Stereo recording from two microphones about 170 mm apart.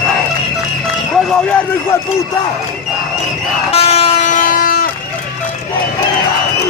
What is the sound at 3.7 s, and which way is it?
Vehicle, 35° left (ahead or behind).